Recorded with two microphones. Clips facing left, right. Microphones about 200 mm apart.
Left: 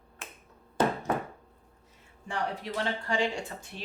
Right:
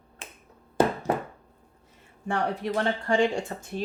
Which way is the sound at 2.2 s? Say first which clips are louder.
Right 6 dB; 55° right (ahead or behind).